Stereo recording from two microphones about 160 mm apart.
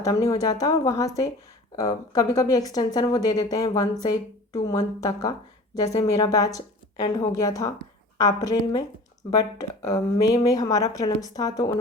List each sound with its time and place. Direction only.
0.0 s speech: 20° left (ahead or behind)